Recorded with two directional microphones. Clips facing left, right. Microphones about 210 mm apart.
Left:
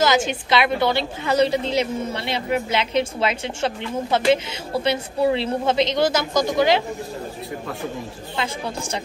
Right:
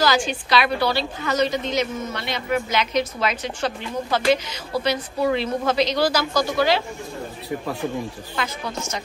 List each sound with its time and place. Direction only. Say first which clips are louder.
0.0 s a woman's voice: left 2 dB; 20° left (ahead or behind)
8.4 s speech: left 2 dB; 30° left (ahead or behind)